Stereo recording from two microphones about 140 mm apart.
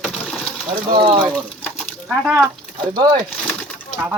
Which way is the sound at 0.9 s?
35° right (ahead or behind).